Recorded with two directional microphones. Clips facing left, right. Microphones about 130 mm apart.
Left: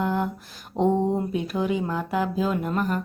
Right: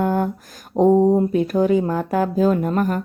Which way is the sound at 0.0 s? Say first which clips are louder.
Right 5 dB; 45° right (ahead or behind).